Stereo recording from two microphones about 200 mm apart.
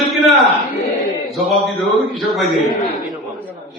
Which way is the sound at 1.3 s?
Centre (ahead or behind).